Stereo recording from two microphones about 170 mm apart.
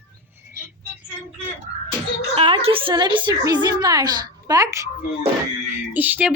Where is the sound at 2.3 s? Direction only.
35° right (ahead or behind).